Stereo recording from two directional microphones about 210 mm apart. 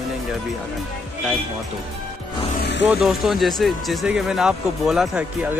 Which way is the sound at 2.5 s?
50° left (ahead or behind).